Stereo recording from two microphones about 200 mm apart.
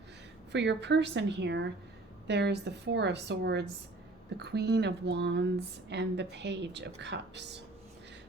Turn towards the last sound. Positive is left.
turn(degrees=-60)  # may be behind; listen again after turning